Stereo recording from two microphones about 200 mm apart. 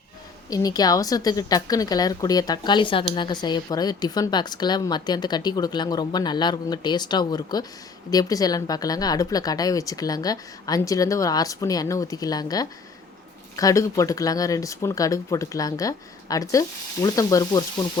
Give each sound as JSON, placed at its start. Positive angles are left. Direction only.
{"t": 0.5, "sound": "speech", "side_deg": 20}